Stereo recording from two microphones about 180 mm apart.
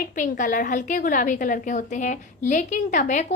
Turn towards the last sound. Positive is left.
turn(degrees=45)  # may be behind; listen again after turning